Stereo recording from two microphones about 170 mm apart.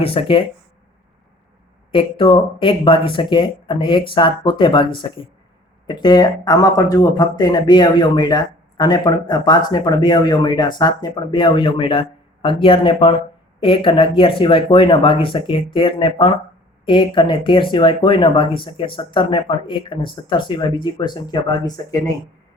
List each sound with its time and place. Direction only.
0.0 s speech: 35° left (ahead or behind)
1.9 s speech: 30° left (ahead or behind)